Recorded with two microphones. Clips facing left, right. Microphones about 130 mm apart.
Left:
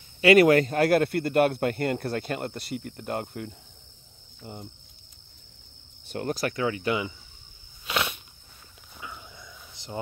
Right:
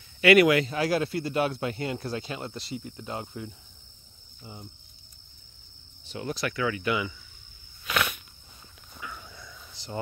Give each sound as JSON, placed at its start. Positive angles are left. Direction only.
{"t": 0.2, "sound": "speech", "side_deg": 35}
{"t": 6.0, "sound": "speech", "side_deg": 50}
{"t": 7.8, "sound": "a sound", "side_deg": 25}